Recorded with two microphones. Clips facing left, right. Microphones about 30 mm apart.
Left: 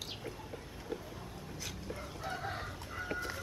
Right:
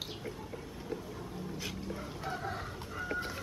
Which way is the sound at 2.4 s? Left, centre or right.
Centre.